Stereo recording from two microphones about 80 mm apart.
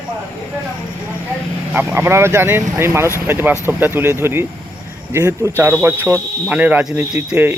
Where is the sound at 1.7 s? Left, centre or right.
Right.